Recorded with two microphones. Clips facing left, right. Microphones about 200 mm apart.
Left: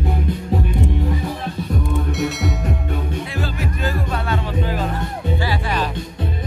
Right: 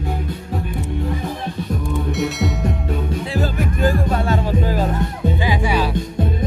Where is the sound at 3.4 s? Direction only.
45° right (ahead or behind).